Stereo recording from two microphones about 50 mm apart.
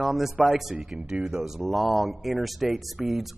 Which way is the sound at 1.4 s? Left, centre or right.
Centre.